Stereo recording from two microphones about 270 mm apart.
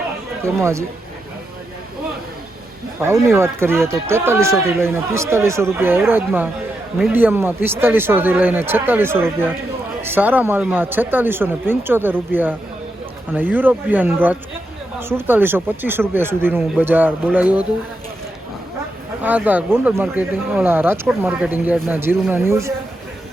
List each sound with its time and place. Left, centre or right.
0.4 s speech: centre
3.0 s speech: centre
19.2 s speech: centre